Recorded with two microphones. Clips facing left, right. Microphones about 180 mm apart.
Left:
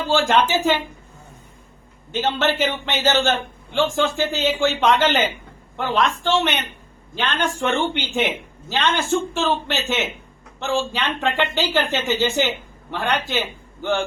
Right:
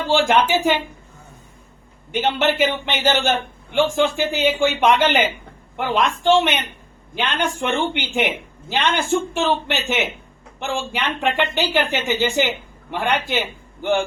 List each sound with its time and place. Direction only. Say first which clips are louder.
0.1 s speech: right 1 dB; 15° right (ahead or behind)
2.1 s speech: right 2 dB; 15° right (ahead or behind)